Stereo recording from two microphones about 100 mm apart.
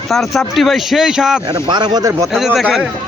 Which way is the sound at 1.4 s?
50° right (ahead or behind).